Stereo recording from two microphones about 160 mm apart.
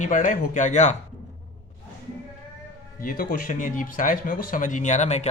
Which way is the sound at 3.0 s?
65° left (ahead or behind).